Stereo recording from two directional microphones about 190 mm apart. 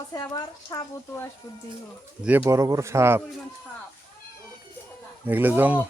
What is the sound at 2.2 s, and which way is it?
A man's voice, 10° right (ahead or behind).